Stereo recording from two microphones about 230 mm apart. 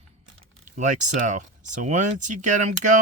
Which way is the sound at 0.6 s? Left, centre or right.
Right.